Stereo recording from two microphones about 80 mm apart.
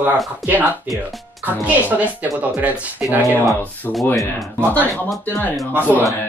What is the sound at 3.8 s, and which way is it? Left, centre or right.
Speech, left.